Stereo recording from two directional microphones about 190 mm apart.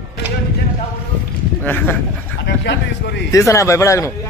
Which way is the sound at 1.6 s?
10° left (ahead or behind).